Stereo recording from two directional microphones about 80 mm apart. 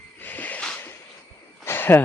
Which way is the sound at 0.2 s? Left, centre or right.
Left.